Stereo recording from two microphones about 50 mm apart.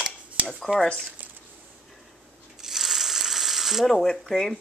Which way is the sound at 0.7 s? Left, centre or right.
Right.